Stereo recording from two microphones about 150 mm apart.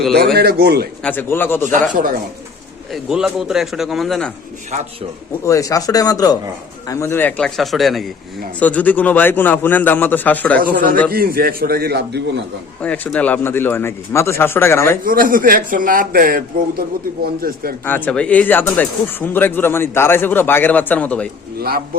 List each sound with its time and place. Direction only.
0.3 s a man's voice: 90° right
1.0 s speech: 15° left (ahead or behind)
1.9 s speech: 65° right (ahead or behind)
2.9 s a man's voice: 5° right (ahead or behind)
5.5 s a man's voice: 20° left (ahead or behind)
10.6 s a man's voice: 70° right (ahead or behind)
11.1 s a man's voice: 85° right
12.8 s speech: 10° left (ahead or behind)
15.0 s a man's voice: 70° right (ahead or behind)
17.8 s speech: 10° left (ahead or behind)